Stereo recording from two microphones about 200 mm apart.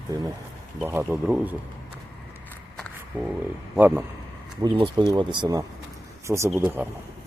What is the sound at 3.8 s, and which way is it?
Speech, 10° right (ahead or behind).